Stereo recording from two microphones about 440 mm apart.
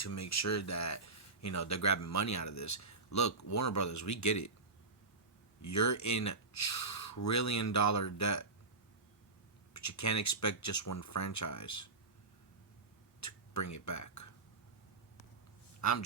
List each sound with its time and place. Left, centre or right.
0.0 s speech: left
5.6 s speech: left
9.7 s speech: left
13.1 s a sound: left
15.8 s a man's voice: left